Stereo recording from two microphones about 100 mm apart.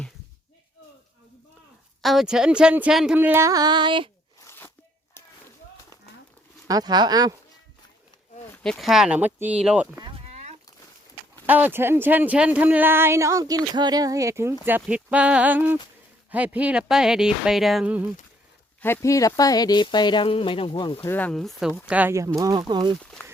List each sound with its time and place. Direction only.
2.0 s speech: centre (ahead or behind)
3.2 s speech: 25° right (ahead or behind)
3.5 s a sound: 45° right (ahead or behind)
4.4 s a sound: 20° left (ahead or behind)
6.7 s speech: 40° right (ahead or behind)
8.6 s speech: 5° left (ahead or behind)
11.4 s speech: 15° right (ahead or behind)
14.6 s speech: 15° right (ahead or behind); by 17.8 s centre (ahead or behind)
18.8 s speech: 25° left (ahead or behind); by 20.2 s 50° left (ahead or behind)
20.2 s speech: 65° left (ahead or behind)
21.1 s speech: 15° left (ahead or behind)
21.3 s speech: centre (ahead or behind)
21.8 s speech: 15° right (ahead or behind)
22.4 s a sound: 40° right (ahead or behind)